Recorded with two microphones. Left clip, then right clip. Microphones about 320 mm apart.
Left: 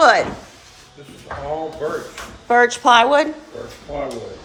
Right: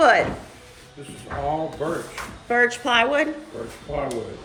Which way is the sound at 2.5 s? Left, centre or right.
Centre.